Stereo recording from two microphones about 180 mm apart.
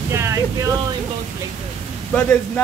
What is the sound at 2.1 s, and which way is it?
Speech, 10° left (ahead or behind).